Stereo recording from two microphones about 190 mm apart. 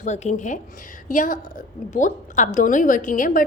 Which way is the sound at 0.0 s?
40° left (ahead or behind).